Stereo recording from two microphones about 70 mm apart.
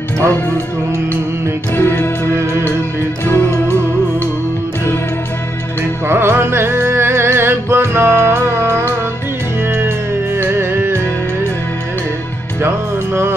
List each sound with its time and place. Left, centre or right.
1.8 s music: left
6.0 s music: right
12.6 s music: right